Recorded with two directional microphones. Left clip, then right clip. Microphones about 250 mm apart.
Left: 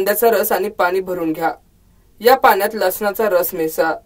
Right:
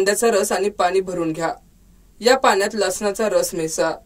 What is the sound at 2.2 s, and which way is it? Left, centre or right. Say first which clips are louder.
A woman's voice: left 4 dB; centre.